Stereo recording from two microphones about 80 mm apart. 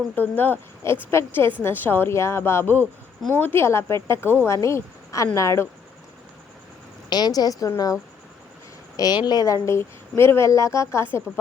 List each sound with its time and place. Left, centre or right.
0.2 s a woman's voice: left
7.1 s a woman's voice: left
9.0 s speech: left